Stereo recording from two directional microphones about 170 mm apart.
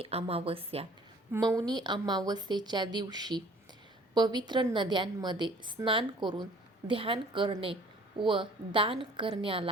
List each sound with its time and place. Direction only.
0.0 s a woman's voice: 35° right (ahead or behind)
1.3 s a woman's voice: 20° right (ahead or behind)